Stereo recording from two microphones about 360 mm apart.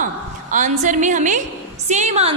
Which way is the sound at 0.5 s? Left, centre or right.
Right.